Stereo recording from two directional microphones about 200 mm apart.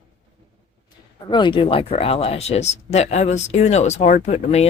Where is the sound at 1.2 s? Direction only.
25° left (ahead or behind).